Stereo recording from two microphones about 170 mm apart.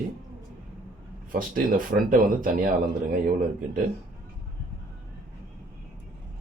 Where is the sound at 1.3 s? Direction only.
55° right (ahead or behind).